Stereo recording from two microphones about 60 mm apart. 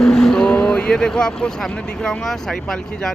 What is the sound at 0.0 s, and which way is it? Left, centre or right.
Speech, centre.